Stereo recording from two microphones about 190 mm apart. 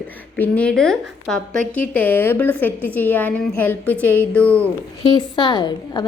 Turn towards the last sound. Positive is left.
turn(degrees=20)  # may be behind; listen again after turning